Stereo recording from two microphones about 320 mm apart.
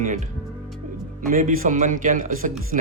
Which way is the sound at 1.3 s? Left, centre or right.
Right.